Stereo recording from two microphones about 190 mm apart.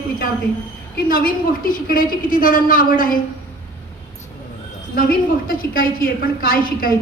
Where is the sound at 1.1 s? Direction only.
50° left (ahead or behind).